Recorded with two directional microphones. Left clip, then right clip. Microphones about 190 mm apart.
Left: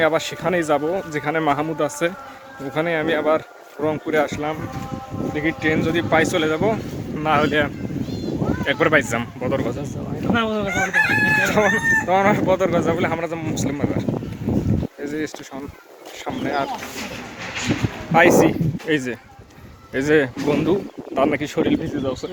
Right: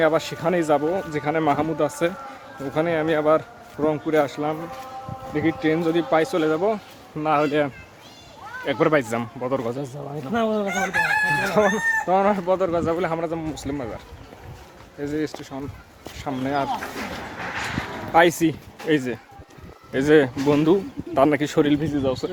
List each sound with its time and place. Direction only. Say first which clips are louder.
0.0 s speech: left 1 dB; centre (ahead or behind)
5.3 s speech: left 1 dB; 15° right (ahead or behind)
10.7 s chicken: left 3 dB; 60° right (ahead or behind)
11.6 s speech: left 3 dB; centre (ahead or behind)
15.0 s speech: even; 5° left (ahead or behind)
18.1 s a man's voice: left 4 dB; 10° right (ahead or behind); by 22.3 s 30° right (ahead or behind)